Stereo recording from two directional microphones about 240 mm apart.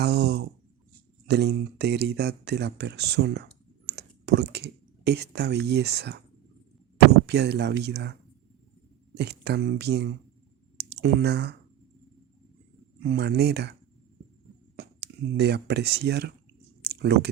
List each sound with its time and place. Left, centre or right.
0.0 s speech: right
9.1 s speech: right
13.1 s speech: right
14.8 s speech: right
16.8 s a sound: right